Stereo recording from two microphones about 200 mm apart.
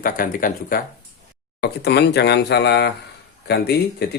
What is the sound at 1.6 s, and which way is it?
Speech, 55° left (ahead or behind).